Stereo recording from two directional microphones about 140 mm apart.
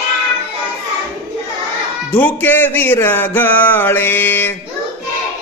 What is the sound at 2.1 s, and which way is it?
Mantra, 15° left (ahead or behind).